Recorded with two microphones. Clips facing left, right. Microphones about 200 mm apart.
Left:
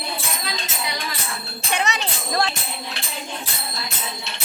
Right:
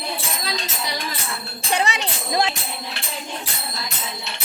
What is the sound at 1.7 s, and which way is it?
Speech, 30° right (ahead or behind).